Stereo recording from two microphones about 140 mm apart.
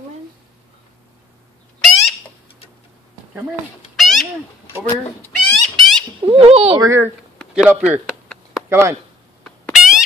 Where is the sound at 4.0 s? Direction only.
Centre (ahead or behind).